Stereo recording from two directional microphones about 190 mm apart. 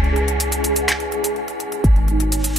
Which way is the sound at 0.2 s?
Centre (ahead or behind).